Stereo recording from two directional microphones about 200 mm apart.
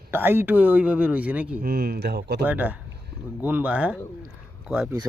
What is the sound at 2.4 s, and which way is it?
Speech, 10° right (ahead or behind).